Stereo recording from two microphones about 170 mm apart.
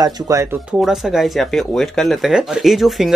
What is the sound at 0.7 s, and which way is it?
Speech, 5° right (ahead or behind).